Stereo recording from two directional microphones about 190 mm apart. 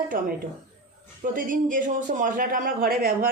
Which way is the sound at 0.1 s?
50° right (ahead or behind).